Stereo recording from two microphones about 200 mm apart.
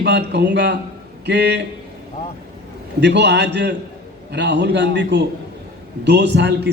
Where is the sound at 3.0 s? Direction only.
60° right (ahead or behind).